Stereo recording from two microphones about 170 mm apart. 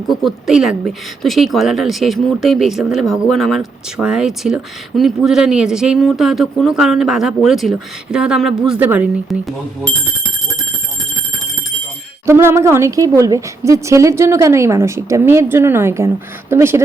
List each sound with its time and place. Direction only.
0.1 s speech: centre (ahead or behind)
12.2 s a woman's voice: 15° right (ahead or behind)